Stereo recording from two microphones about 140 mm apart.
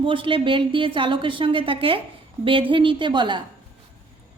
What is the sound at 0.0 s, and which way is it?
A woman's voice, 40° right (ahead or behind).